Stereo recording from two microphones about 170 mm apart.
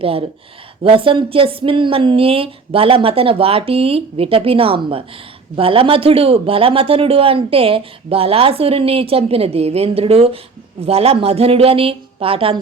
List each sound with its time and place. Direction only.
0.0 s a man's voice: 35° right (ahead or behind)